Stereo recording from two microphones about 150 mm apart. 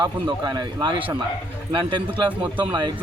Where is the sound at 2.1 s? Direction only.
10° right (ahead or behind).